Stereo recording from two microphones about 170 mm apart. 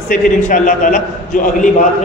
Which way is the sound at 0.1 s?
50° left (ahead or behind).